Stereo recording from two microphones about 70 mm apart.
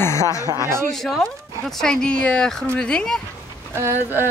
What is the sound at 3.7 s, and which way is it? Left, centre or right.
Speech, right.